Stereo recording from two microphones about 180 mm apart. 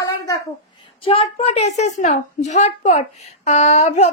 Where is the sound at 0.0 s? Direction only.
25° left (ahead or behind).